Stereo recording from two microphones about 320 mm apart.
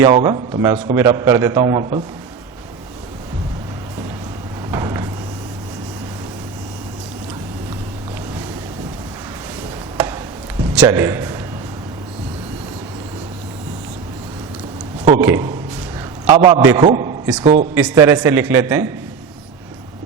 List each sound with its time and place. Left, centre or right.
0.0 s a man's voice: centre
4.7 s vehicle: centre
10.7 s a man's voice: centre
15.0 s a man's voice: centre
16.3 s a man's voice: centre
17.7 s a man's voice: centre